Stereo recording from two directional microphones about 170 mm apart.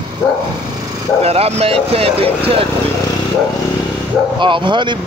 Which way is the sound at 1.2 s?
35° right (ahead or behind).